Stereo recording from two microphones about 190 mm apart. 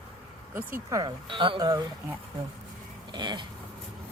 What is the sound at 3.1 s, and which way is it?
Speech, 25° right (ahead or behind).